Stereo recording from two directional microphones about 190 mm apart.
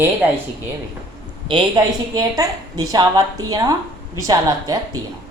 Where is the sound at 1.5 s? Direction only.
25° right (ahead or behind).